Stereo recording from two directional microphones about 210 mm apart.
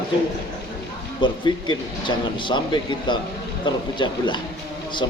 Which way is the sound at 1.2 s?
20° left (ahead or behind).